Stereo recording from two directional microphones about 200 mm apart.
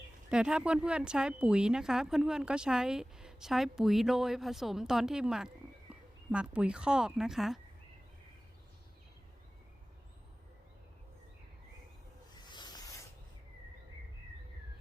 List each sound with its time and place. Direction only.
0.3 s speech: 5° right (ahead or behind)
12.5 s rub: 20° left (ahead or behind)